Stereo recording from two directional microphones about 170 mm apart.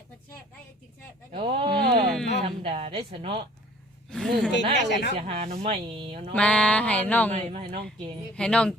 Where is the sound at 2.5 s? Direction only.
35° right (ahead or behind).